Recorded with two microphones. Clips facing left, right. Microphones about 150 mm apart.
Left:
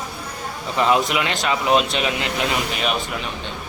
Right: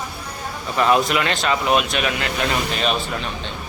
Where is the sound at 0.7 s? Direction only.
20° left (ahead or behind).